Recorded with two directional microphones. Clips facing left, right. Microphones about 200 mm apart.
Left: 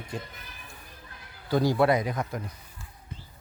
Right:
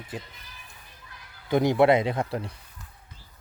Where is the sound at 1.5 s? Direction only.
20° right (ahead or behind).